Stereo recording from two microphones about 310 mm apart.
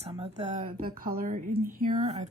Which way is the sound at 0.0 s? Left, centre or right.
Centre.